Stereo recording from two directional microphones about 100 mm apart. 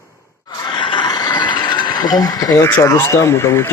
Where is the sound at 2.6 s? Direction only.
25° left (ahead or behind).